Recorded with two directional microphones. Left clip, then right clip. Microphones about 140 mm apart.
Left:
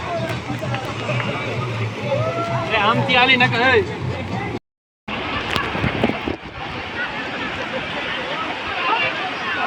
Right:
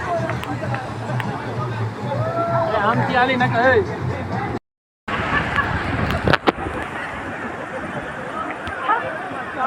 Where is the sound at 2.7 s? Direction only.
25° right (ahead or behind).